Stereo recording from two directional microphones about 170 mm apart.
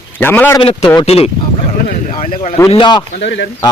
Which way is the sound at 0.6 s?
30° left (ahead or behind).